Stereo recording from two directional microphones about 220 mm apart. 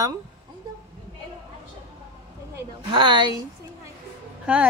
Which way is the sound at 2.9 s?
20° right (ahead or behind).